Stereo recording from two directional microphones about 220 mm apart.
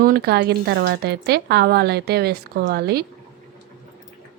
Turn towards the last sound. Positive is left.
turn(degrees=-45)  # may be behind; listen again after turning